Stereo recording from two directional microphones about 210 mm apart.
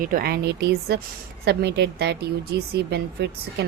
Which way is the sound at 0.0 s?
40° right (ahead or behind).